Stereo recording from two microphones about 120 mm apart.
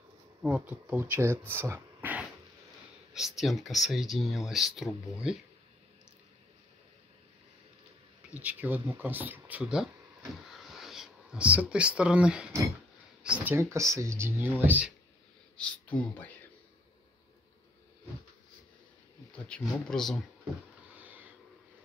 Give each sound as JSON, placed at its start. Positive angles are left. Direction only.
{"t": 0.4, "sound": "speech", "side_deg": -10}
{"t": 3.1, "sound": "speech", "side_deg": -5}
{"t": 8.3, "sound": "speech", "side_deg": -15}
{"t": 10.5, "sound": "a sound", "side_deg": 0}
{"t": 11.7, "sound": "speech", "side_deg": -10}
{"t": 15.5, "sound": "speech", "side_deg": 10}
{"t": 19.3, "sound": "speech", "side_deg": 10}
{"t": 20.9, "sound": "a sound", "side_deg": -15}